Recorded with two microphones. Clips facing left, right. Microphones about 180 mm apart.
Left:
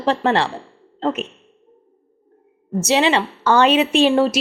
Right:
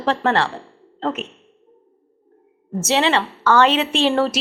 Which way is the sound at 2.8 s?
15° left (ahead or behind).